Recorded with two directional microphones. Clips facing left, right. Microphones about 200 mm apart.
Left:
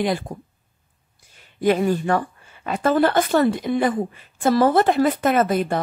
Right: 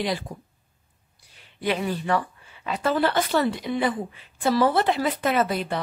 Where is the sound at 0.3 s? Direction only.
55° left (ahead or behind).